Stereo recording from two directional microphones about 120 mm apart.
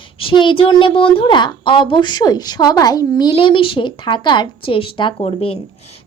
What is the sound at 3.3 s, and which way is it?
Speech, 45° left (ahead or behind).